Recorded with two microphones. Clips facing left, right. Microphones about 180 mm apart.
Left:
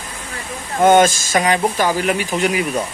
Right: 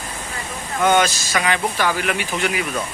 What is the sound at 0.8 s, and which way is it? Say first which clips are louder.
Speech: left 6 dB; 45° left (ahead or behind).